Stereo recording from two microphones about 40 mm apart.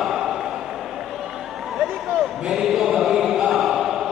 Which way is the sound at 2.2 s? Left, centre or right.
Centre.